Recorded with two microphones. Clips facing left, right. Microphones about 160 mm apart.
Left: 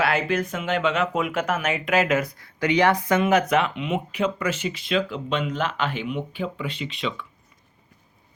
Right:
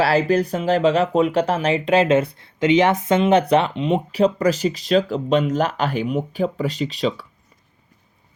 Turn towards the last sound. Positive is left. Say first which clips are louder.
# right 7 dB
turn(degrees=-35)  # may be behind; listen again after turning